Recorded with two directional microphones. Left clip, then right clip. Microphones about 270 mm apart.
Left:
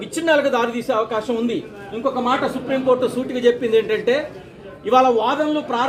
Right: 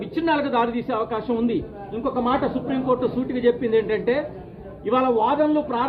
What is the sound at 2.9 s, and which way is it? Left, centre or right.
A man's voice, centre.